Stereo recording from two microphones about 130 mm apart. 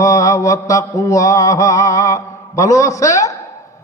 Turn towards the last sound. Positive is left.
turn(degrees=25)  # may be behind; listen again after turning